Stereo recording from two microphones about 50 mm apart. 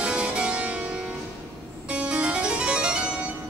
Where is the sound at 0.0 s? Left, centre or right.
Right.